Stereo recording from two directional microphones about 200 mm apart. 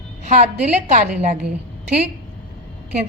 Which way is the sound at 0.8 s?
35° right (ahead or behind).